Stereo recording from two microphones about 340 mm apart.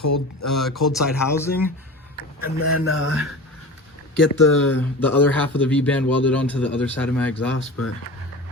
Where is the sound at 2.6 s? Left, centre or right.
Left.